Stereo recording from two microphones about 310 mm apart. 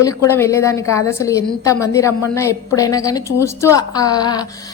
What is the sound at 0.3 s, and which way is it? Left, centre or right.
A woman's voice, centre.